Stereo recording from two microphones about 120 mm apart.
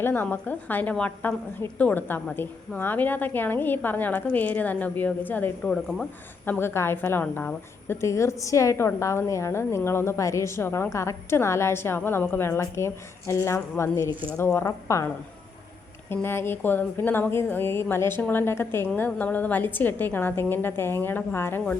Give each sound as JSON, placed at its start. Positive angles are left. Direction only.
{"t": 0.0, "sound": "a woman's voice", "side_deg": 15}